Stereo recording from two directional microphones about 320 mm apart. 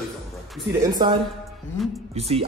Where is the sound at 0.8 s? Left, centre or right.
Centre.